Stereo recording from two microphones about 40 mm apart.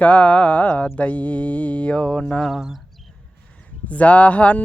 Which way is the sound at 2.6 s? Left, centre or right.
Centre.